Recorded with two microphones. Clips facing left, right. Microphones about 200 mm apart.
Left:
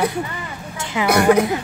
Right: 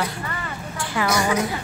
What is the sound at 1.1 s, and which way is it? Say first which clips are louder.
Speech: left 9 dB; 60° left (ahead or behind).